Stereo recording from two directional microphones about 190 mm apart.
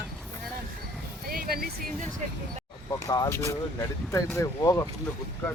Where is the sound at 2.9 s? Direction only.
20° left (ahead or behind).